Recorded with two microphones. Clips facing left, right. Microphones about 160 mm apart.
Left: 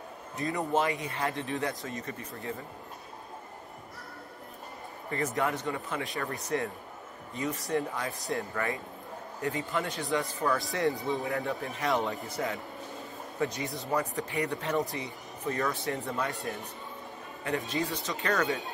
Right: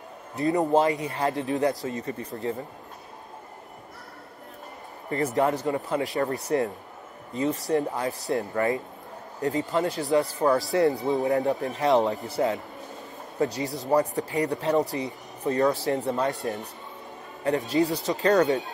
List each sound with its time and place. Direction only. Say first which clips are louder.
0.4 s speech: right 7 dB; 35° right (ahead or behind)
5.1 s speech: right 6 dB; 35° right (ahead or behind)